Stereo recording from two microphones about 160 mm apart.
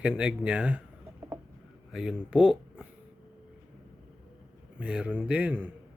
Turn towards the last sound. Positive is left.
turn(degrees=-10)  # may be behind; listen again after turning